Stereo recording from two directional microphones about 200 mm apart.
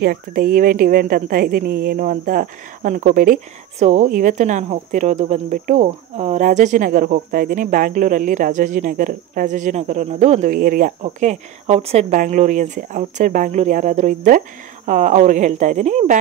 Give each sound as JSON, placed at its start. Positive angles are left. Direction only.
{"t": 0.0, "sound": "a woman's voice", "side_deg": -45}
{"t": 11.0, "sound": "speech", "side_deg": -35}